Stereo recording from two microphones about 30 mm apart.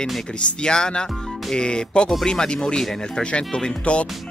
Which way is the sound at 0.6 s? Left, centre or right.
Left.